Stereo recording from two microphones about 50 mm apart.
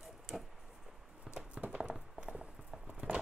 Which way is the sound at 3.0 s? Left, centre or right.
Right.